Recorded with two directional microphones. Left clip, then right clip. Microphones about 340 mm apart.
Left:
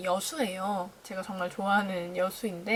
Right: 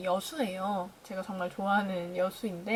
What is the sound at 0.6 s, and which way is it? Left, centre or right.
Speech, centre.